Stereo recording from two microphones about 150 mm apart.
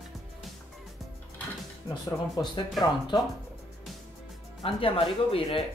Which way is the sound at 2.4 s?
25° left (ahead or behind).